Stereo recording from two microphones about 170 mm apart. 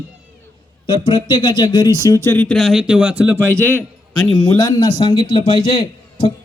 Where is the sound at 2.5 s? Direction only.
Centre (ahead or behind).